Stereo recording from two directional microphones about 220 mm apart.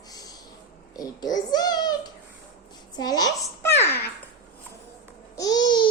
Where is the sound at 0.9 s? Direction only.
15° left (ahead or behind).